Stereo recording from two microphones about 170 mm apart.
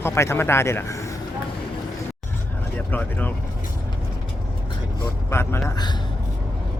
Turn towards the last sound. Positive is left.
turn(degrees=15)  # may be behind; listen again after turning